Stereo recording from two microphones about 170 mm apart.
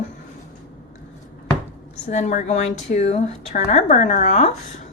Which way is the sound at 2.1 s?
45° left (ahead or behind).